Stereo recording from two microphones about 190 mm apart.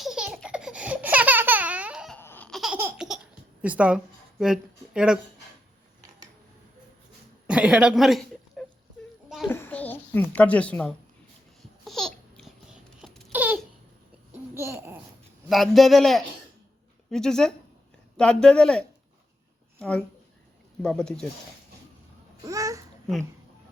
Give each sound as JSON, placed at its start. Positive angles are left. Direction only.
{"t": 0.0, "sound": "baby laughter", "side_deg": -5}
{"t": 2.1, "sound": "a sound", "side_deg": 10}
{"t": 2.7, "sound": "laughter", "side_deg": -15}
{"t": 3.6, "sound": "a woman's voice", "side_deg": -5}
{"t": 7.4, "sound": "speech", "side_deg": -5}
{"t": 9.5, "sound": "a sound", "side_deg": 10}
{"t": 11.9, "sound": "babbling", "side_deg": 0}
{"t": 13.0, "sound": "a sound", "side_deg": 0}
{"t": 14.5, "sound": "babbling", "side_deg": -15}
{"t": 15.4, "sound": "speech", "side_deg": 0}
{"t": 22.4, "sound": "babbling", "side_deg": -15}